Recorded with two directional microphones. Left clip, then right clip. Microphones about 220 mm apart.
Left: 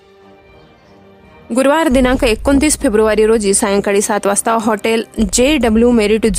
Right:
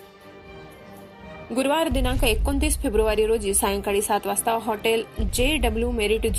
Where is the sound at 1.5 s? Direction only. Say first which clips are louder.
Left 11 dB; 35° left (ahead or behind).